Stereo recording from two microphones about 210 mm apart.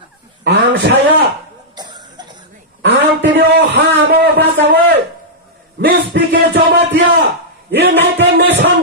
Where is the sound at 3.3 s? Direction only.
55° right (ahead or behind).